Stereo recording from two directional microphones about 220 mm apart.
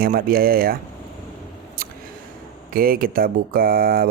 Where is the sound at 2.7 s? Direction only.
40° right (ahead or behind).